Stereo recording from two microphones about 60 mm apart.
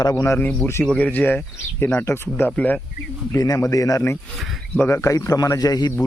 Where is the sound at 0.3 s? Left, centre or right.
Left.